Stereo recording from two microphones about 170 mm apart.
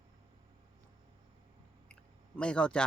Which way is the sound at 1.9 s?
5° left (ahead or behind).